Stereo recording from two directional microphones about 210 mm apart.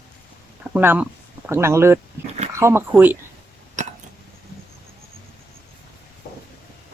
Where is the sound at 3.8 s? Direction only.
35° right (ahead or behind).